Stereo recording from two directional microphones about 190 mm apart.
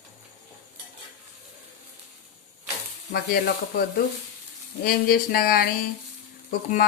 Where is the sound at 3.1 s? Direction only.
55° left (ahead or behind).